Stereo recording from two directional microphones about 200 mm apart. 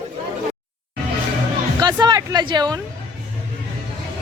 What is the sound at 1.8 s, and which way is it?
Speech, 20° right (ahead or behind).